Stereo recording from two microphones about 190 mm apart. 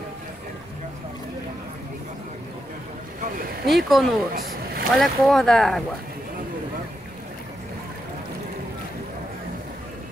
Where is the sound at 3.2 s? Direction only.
50° right (ahead or behind).